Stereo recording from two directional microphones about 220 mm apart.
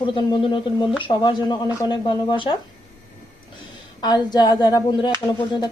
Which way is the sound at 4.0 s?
20° left (ahead or behind).